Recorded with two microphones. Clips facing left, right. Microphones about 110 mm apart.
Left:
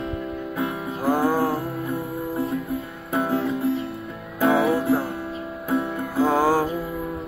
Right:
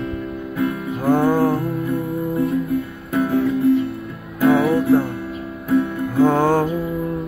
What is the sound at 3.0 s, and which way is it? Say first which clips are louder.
Music: right 4 dB; 25° left (ahead or behind).